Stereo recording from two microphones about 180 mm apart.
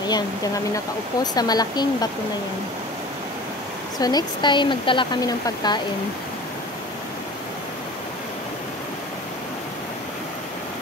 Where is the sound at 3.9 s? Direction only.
20° left (ahead or behind).